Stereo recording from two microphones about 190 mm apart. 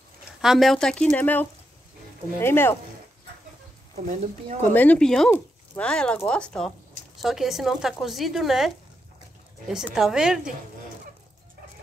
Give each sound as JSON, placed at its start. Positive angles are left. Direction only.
{"t": 0.4, "sound": "speech", "side_deg": 0}
{"t": 4.0, "sound": "speech", "side_deg": -45}
{"t": 4.7, "sound": "speech", "side_deg": 5}